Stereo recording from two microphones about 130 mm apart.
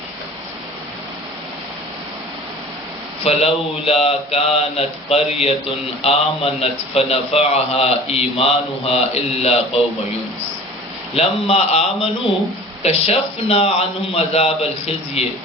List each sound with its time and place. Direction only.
3.2 s a man's voice: 50° left (ahead or behind)
11.1 s a man's voice: 50° left (ahead or behind)